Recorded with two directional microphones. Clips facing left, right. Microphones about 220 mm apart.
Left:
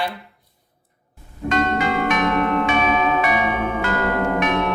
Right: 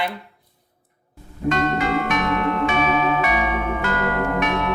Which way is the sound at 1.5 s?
Centre (ahead or behind).